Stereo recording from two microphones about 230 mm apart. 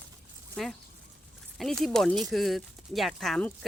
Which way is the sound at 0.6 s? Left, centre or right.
Centre.